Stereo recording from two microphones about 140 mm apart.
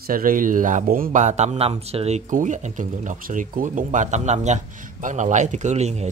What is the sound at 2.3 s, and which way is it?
Speech, 65° right (ahead or behind).